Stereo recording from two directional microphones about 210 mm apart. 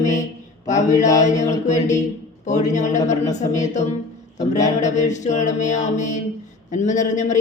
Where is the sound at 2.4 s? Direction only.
35° left (ahead or behind).